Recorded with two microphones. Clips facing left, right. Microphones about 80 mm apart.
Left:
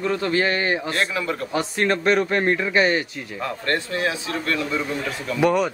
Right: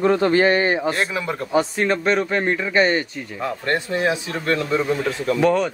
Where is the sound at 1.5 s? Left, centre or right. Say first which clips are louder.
Right 4 dB; centre.